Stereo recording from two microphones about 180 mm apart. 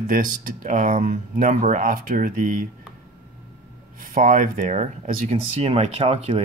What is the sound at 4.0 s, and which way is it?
Speech, 50° right (ahead or behind).